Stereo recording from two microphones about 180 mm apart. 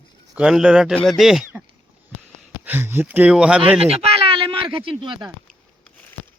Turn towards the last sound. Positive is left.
turn(degrees=-25)  # may be behind; listen again after turning